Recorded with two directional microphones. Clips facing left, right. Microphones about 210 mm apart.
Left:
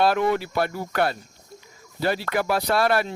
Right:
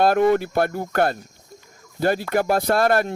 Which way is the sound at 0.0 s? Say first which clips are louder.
Right 4 dB; 50° right (ahead or behind).